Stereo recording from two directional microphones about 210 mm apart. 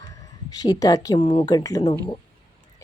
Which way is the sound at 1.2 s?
35° left (ahead or behind).